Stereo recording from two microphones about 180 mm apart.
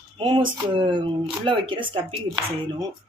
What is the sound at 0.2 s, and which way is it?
Speech, 30° right (ahead or behind).